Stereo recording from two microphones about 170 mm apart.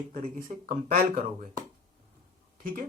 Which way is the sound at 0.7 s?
55° right (ahead or behind).